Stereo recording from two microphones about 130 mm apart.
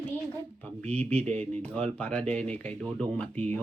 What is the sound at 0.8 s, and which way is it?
Speech, 60° right (ahead or behind).